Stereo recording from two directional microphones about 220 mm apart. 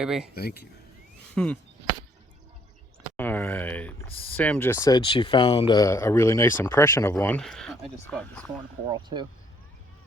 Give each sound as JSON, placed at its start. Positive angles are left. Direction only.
{"t": 0.0, "sound": "speech", "side_deg": -5}
{"t": 0.3, "sound": "speech", "side_deg": 45}
{"t": 1.4, "sound": "speech", "side_deg": 5}
{"t": 3.2, "sound": "speech", "side_deg": 10}
{"t": 8.5, "sound": "speech", "side_deg": -20}